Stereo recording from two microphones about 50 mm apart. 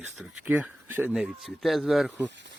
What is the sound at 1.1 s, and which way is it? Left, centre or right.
Speech, centre.